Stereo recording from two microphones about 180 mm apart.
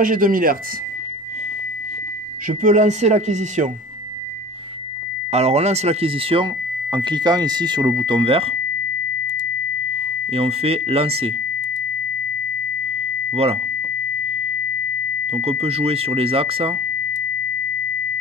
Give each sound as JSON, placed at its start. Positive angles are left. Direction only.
{"t": 0.0, "sound": "speech", "side_deg": -50}
{"t": 2.4, "sound": "speech", "side_deg": -45}
{"t": 5.3, "sound": "speech", "side_deg": -35}
{"t": 10.3, "sound": "speech", "side_deg": -35}
{"t": 13.3, "sound": "speech", "side_deg": -35}
{"t": 15.2, "sound": "speech", "side_deg": -35}